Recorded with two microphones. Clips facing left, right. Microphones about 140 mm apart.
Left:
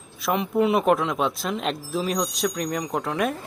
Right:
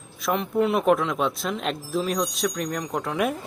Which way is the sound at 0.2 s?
Centre (ahead or behind).